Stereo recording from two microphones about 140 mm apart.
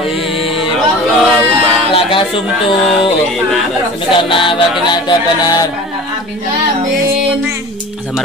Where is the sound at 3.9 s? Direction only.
40° left (ahead or behind).